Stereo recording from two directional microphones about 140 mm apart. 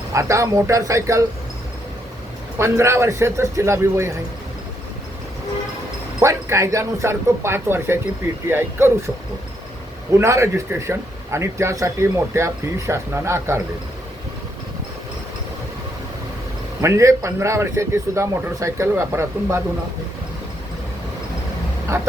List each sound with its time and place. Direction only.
0.1 s a man's voice: 20° right (ahead or behind)
2.6 s a man's voice: 20° right (ahead or behind)
6.1 s a man's voice: 20° right (ahead or behind)
10.1 s a man's voice: 20° right (ahead or behind)
16.8 s a man's voice: 20° right (ahead or behind)